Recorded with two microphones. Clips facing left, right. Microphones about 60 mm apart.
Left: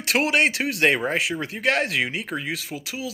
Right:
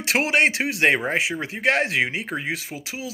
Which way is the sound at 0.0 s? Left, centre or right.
Right.